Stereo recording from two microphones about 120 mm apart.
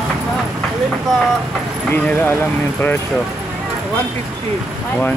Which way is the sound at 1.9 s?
15° left (ahead or behind).